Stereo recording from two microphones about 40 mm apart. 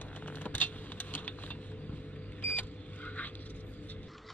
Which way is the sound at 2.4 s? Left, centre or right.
Left.